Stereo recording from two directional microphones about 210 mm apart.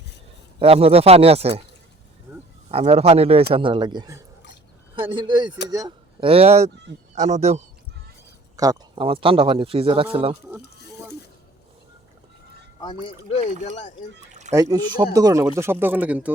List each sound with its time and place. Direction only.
0.6 s speech: 25° right (ahead or behind)
2.6 s a man's voice: 30° right (ahead or behind)
8.5 s speech: 15° right (ahead or behind)
10.6 s a sound: 50° left (ahead or behind)
12.8 s speech: 25° left (ahead or behind)
14.5 s speech: 15° right (ahead or behind)